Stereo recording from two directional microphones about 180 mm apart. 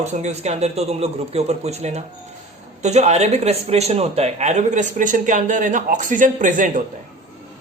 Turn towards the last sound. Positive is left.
turn(degrees=-45)  # may be behind; listen again after turning